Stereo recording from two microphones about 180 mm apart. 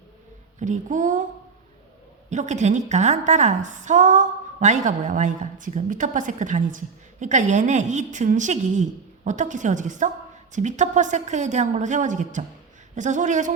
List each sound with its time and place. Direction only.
0.6 s a woman's voice: 45° right (ahead or behind)
2.3 s a woman's voice: 40° right (ahead or behind)